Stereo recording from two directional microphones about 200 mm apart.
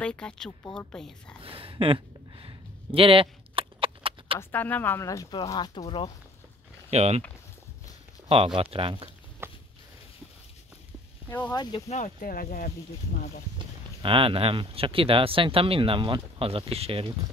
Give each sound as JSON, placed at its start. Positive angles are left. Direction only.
{"t": 0.0, "sound": "a woman's voice", "side_deg": 5}
{"t": 1.4, "sound": "a sound", "side_deg": -25}
{"t": 4.4, "sound": "speech", "side_deg": 10}
{"t": 6.9, "sound": "speech", "side_deg": -30}
{"t": 8.7, "sound": "speech", "side_deg": -25}
{"t": 9.4, "sound": "a sound", "side_deg": -10}
{"t": 11.2, "sound": "speech", "side_deg": 15}
{"t": 11.9, "sound": "speech", "side_deg": 40}
{"t": 14.0, "sound": "speech", "side_deg": -25}